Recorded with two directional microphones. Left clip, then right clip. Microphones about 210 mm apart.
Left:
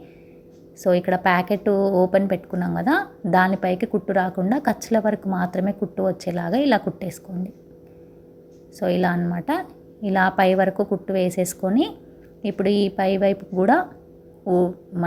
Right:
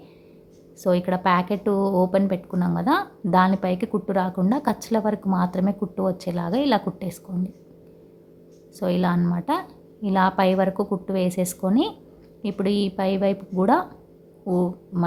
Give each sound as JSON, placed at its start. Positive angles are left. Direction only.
{"t": 0.8, "sound": "a woman's voice", "side_deg": 0}
{"t": 8.8, "sound": "a woman's voice", "side_deg": 0}